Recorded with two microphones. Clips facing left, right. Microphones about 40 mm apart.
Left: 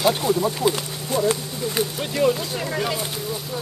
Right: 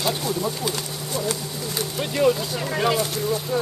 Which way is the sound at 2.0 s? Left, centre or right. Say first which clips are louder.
Right 3 dB; centre.